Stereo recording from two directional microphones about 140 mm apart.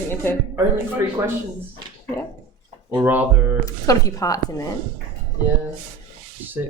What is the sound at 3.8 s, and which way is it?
Speech, 25° left (ahead or behind).